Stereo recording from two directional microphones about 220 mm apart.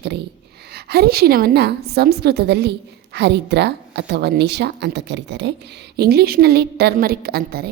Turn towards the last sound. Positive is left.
turn(degrees=-45)  # may be behind; listen again after turning